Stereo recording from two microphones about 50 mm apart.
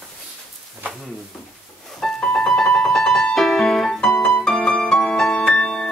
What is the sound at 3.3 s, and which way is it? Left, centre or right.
Music, centre.